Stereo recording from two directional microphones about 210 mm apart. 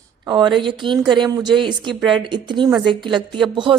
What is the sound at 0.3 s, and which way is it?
A woman's voice, 20° right (ahead or behind).